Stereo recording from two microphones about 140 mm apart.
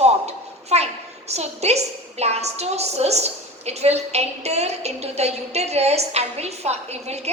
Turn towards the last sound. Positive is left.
turn(degrees=-50)  # may be behind; listen again after turning